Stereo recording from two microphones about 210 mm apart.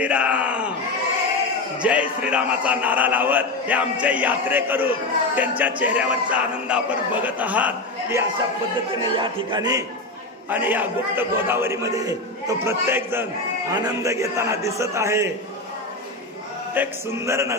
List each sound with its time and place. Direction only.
0.0 s speech: 5° right (ahead or behind)
1.8 s a man's voice: 5° right (ahead or behind)
9.0 s a man's voice: 25° right (ahead or behind)
16.7 s a man's voice: 10° right (ahead or behind)